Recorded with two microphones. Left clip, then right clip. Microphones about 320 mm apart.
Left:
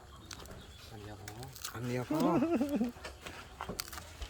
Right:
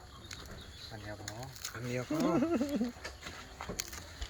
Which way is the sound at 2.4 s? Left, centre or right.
Centre.